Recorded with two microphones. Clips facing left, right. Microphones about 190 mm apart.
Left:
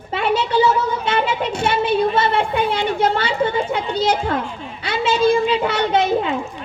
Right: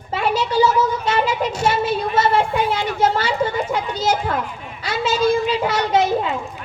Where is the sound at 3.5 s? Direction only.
30° left (ahead or behind).